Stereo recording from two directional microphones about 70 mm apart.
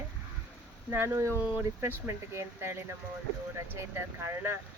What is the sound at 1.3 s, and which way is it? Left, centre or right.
Speech, right.